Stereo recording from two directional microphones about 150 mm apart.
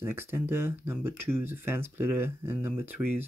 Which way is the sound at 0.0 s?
15° right (ahead or behind).